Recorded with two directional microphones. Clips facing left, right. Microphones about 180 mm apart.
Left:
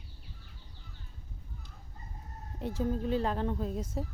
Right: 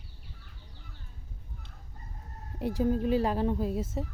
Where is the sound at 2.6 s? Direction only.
15° right (ahead or behind).